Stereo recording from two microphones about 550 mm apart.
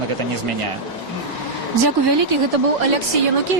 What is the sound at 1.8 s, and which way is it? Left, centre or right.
Speech, right.